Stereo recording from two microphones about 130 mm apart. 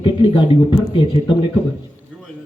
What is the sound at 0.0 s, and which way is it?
Speech, 40° left (ahead or behind).